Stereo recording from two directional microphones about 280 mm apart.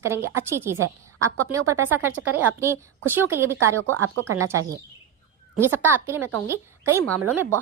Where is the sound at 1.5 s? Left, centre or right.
Centre.